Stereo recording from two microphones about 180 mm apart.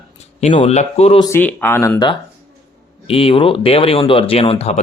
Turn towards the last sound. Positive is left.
turn(degrees=35)  # may be behind; listen again after turning